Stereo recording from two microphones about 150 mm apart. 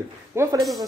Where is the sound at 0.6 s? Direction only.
Centre (ahead or behind).